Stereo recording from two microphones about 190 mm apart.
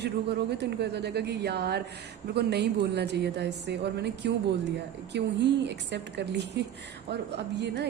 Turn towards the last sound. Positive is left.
turn(degrees=-60)  # may be behind; listen again after turning